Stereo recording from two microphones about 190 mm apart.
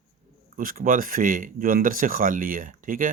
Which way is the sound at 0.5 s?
45° right (ahead or behind).